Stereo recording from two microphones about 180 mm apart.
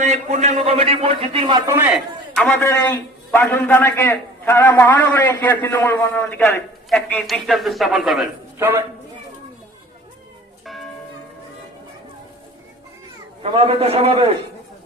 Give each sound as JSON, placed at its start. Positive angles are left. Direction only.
{"t": 0.0, "sound": "a man's voice", "side_deg": -40}
{"t": 2.3, "sound": "a man's voice", "side_deg": 0}
{"t": 2.6, "sound": "a man's voice", "side_deg": 15}
{"t": 6.9, "sound": "a man's voice", "side_deg": 0}
{"t": 8.5, "sound": "a man's voice", "side_deg": -10}
{"t": 13.4, "sound": "a man's voice", "side_deg": -30}